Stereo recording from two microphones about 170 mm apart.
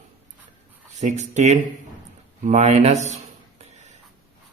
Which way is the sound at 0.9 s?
45° right (ahead or behind).